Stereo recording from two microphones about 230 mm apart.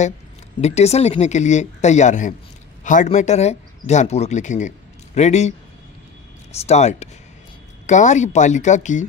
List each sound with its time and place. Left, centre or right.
0.6 s speech: left
6.5 s speech: left